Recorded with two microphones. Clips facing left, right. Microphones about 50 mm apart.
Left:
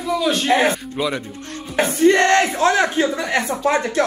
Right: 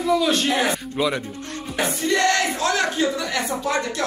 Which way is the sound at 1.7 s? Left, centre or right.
Left.